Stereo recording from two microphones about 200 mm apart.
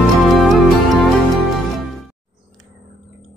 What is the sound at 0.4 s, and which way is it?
Music, centre (ahead or behind).